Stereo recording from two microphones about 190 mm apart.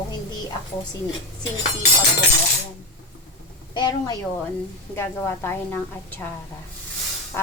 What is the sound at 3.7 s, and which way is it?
A woman's voice, 20° left (ahead or behind).